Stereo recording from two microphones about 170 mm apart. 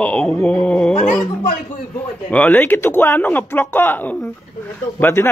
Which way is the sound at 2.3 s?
10° left (ahead or behind).